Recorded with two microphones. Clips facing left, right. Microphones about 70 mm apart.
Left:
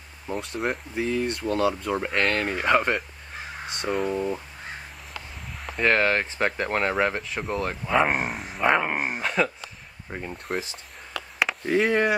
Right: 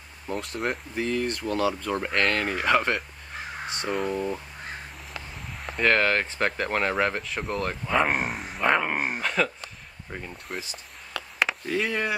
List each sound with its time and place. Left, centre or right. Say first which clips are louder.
0.3 s speech: left 1 dB; centre
5.6 s speech: left 1 dB; centre
11.1 s a sound: even; centre
11.9 s speech: left 6 dB; left